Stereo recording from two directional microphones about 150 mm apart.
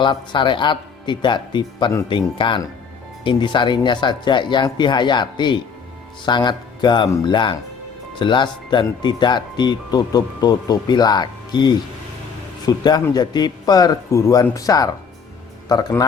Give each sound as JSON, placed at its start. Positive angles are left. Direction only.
{"t": 0.0, "sound": "speech", "side_deg": 30}